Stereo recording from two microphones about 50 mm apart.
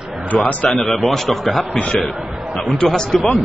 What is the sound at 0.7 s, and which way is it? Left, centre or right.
A man's voice, centre.